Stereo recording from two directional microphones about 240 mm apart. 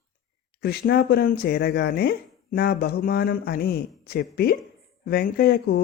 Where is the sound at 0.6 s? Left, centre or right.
Left.